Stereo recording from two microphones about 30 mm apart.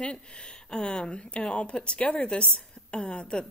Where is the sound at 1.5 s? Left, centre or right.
Left.